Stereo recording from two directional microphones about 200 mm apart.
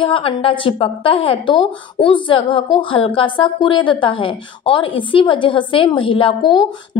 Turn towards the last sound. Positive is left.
turn(degrees=25)  # may be behind; listen again after turning